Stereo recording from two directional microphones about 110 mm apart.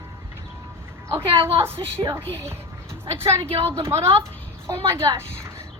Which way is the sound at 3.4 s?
60° right (ahead or behind).